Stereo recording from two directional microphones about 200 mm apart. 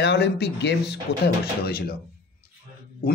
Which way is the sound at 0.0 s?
55° left (ahead or behind).